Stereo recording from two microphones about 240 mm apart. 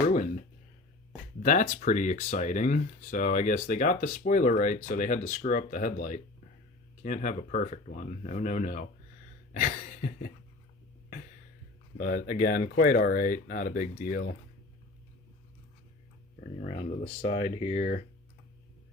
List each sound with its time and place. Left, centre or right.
1.4 s speech: left
9.5 s a sound: left
11.9 s speech: left
16.4 s speech: left